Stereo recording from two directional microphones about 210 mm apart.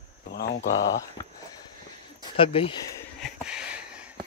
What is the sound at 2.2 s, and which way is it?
Speech, 25° left (ahead or behind).